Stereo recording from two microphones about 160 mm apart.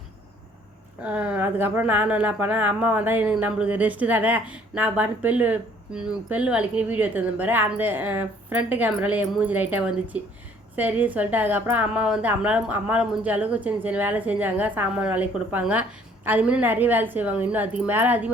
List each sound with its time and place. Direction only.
1.0 s a woman's voice: 10° right (ahead or behind)